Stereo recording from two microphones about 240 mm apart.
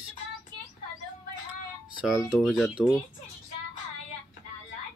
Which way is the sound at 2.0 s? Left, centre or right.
Centre.